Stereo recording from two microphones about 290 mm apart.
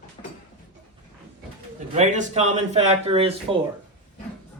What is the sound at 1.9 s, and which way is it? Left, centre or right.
Speech, right.